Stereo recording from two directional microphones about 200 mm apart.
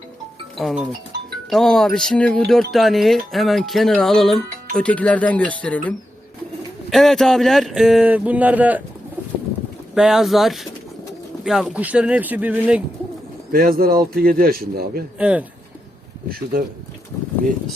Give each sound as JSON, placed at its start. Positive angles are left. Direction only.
{"t": 0.6, "sound": "music", "side_deg": 0}
{"t": 5.5, "sound": "speech", "side_deg": 5}
{"t": 6.9, "sound": "music", "side_deg": 0}
{"t": 9.9, "sound": "music", "side_deg": 0}
{"t": 11.4, "sound": "speech", "side_deg": 0}
{"t": 13.5, "sound": "a man's voice", "side_deg": -45}
{"t": 15.2, "sound": "speech", "side_deg": -5}
{"t": 16.3, "sound": "a man's voice", "side_deg": -45}